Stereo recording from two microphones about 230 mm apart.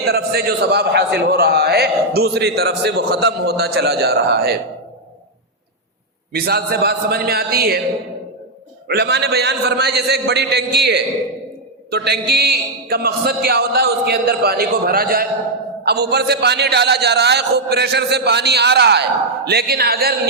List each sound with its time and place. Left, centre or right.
0.1 s a man's voice: right
6.3 s a man's voice: right
8.9 s a man's voice: right